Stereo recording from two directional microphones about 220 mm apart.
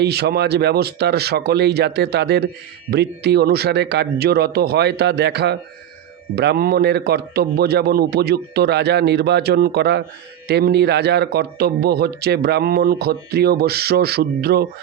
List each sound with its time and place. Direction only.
0.0 s speech: 45° right (ahead or behind)